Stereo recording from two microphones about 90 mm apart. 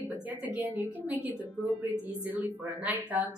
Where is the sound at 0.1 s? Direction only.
20° right (ahead or behind).